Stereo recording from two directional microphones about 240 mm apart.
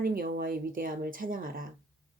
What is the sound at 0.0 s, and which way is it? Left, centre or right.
Speech, right.